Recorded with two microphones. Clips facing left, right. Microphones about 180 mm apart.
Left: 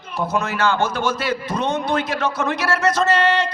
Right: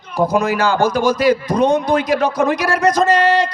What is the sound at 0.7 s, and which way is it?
Speech, 35° right (ahead or behind).